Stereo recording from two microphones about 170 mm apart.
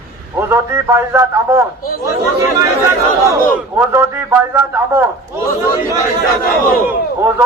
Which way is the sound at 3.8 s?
15° right (ahead or behind).